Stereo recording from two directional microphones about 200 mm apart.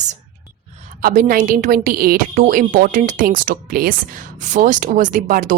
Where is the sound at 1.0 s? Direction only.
45° right (ahead or behind).